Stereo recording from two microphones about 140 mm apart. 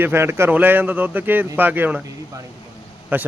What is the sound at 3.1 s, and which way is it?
Speech, 15° right (ahead or behind).